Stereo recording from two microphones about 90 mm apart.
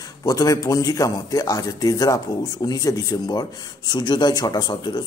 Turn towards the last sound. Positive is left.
turn(degrees=55)  # may be behind; listen again after turning